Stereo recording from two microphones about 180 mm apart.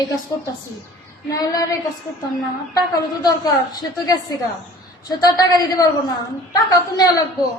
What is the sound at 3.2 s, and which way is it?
A woman's voice, 20° left (ahead or behind).